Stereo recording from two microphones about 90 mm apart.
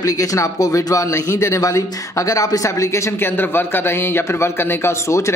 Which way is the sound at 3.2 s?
25° left (ahead or behind).